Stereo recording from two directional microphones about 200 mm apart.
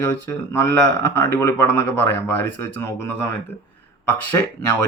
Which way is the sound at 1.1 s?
10° left (ahead or behind).